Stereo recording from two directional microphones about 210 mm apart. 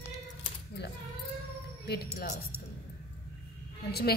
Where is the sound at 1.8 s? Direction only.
50° left (ahead or behind).